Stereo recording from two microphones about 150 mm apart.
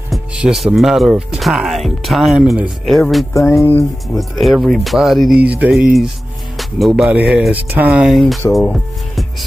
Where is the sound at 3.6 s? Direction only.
15° left (ahead or behind).